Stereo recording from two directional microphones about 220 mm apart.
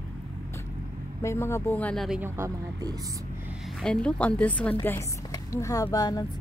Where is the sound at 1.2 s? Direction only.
10° left (ahead or behind); by 2.9 s 15° right (ahead or behind).